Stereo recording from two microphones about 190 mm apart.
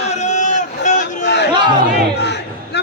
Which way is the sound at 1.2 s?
65° left (ahead or behind).